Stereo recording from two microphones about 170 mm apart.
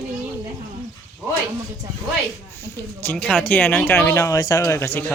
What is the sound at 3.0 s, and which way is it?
Speech, 10° left (ahead or behind).